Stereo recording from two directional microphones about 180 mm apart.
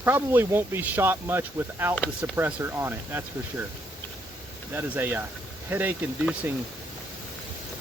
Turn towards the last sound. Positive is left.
turn(degrees=-10)  # may be behind; listen again after turning